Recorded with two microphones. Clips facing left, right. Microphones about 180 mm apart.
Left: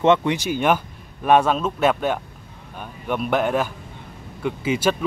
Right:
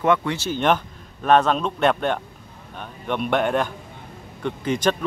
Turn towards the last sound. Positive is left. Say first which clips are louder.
# left 1 dB
turn(degrees=5)  # may be behind; listen again after turning